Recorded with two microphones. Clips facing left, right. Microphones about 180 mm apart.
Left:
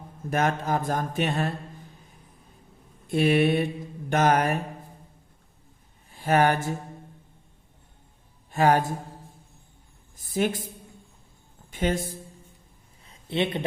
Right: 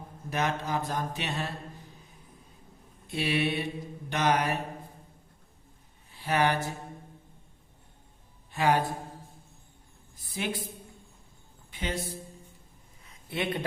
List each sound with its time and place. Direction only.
0.3 s speech: 50° left (ahead or behind)
3.1 s speech: 50° left (ahead or behind)
6.1 s speech: 45° left (ahead or behind)
8.5 s a man's voice: 45° left (ahead or behind)
10.2 s speech: 45° left (ahead or behind)
11.7 s speech: 50° left (ahead or behind)
13.1 s a sound: 25° left (ahead or behind)